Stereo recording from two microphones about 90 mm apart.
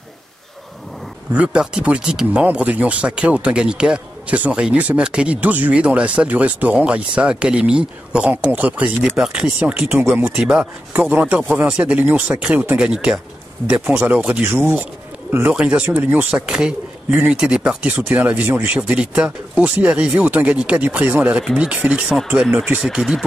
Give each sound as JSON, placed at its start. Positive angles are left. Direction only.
{"t": 1.3, "sound": "speech", "side_deg": -10}
{"t": 15.5, "sound": "speech", "side_deg": -15}
{"t": 18.9, "sound": "speech", "side_deg": -10}